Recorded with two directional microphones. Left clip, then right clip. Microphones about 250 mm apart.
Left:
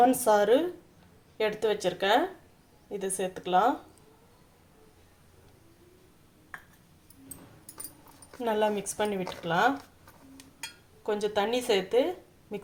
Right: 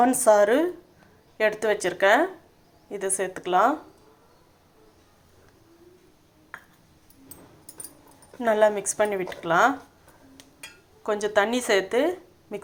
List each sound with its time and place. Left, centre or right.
0.0 s speech: centre
8.4 s speech: centre
11.0 s a woman's voice: centre